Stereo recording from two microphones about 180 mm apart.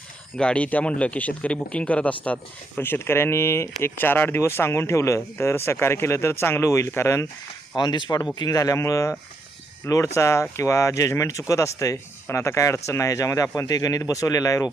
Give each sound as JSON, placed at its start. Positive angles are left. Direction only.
{"t": 0.3, "sound": "speech", "side_deg": 5}